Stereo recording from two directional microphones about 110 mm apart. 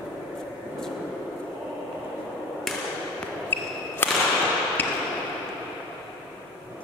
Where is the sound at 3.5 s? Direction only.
20° left (ahead or behind).